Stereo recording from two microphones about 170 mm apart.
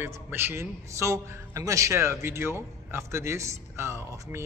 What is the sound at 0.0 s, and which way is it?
A man's voice, 15° right (ahead or behind).